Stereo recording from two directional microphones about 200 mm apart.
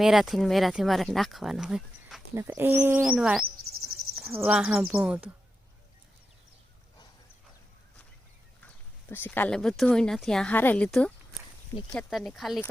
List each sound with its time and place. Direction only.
0.0 s speech: centre (ahead or behind)
2.3 s speech: 15° right (ahead or behind)
3.7 s cricket: 90° right
4.1 s cricket: centre (ahead or behind)
4.4 s speech: 5° right (ahead or behind)
8.6 s speech: 10° left (ahead or behind)